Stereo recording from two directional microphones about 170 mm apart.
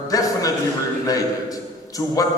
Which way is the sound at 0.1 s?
20° left (ahead or behind).